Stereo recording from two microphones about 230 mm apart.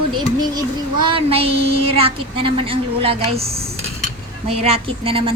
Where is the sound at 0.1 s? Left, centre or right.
Centre.